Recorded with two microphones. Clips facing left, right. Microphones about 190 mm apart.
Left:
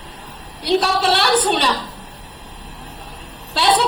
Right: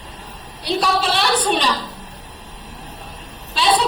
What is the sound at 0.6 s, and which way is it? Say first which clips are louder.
A woman's voice: left 3 dB; 65° left (ahead or behind).